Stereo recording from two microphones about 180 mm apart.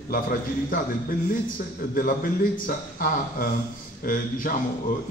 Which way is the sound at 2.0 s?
50° left (ahead or behind).